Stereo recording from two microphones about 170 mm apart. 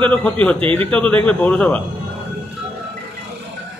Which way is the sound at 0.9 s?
10° left (ahead or behind).